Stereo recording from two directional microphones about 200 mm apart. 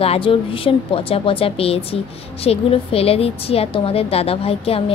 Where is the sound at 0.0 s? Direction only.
30° left (ahead or behind).